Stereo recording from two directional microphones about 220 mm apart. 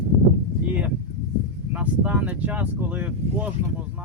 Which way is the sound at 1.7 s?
5° right (ahead or behind).